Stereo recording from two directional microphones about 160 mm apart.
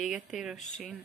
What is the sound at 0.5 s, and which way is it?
Speech, 50° left (ahead or behind).